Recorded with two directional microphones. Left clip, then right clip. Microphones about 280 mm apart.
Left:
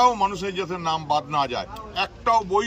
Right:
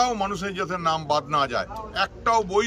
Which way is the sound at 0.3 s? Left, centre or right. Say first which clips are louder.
Even; centre.